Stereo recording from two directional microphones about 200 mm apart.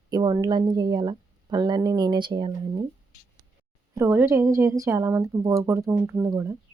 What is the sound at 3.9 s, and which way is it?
Speech, 15° right (ahead or behind).